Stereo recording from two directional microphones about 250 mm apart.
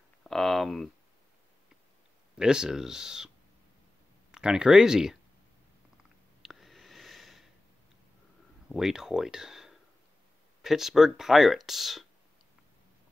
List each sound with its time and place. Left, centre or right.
0.2 s speech: centre
2.3 s speech: centre
4.3 s speech: centre
6.4 s a sound: centre
8.6 s speech: centre